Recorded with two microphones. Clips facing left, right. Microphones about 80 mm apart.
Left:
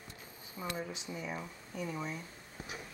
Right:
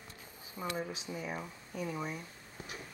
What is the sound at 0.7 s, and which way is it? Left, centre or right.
Speech, centre.